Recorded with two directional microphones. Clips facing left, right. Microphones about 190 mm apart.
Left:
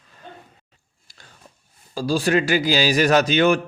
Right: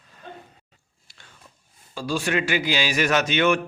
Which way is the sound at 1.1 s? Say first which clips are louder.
Left 2 dB; 40° left (ahead or behind).